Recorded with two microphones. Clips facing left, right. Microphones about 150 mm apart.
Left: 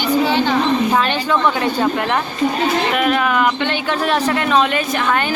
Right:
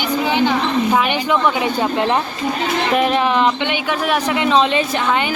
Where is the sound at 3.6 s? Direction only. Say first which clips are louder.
Left 1 dB; 10° right (ahead or behind).